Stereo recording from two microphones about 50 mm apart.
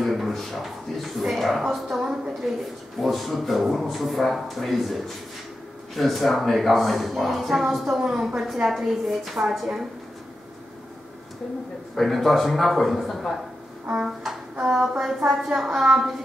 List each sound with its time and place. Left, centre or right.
0.0 s a man's voice: centre
1.9 s a woman's voice: centre
8.6 s speech: centre
11.9 s speech: centre
14.2 s music: centre
14.8 s a woman's voice: centre